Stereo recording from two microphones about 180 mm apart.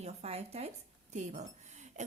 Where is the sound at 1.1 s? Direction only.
40° right (ahead or behind).